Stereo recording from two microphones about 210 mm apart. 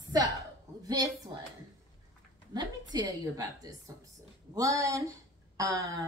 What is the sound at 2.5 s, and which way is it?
A woman's voice, 20° right (ahead or behind).